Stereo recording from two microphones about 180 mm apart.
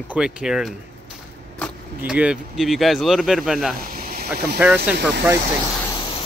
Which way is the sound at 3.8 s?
55° right (ahead or behind).